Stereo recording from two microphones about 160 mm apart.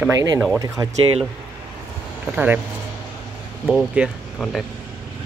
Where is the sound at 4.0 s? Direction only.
10° right (ahead or behind).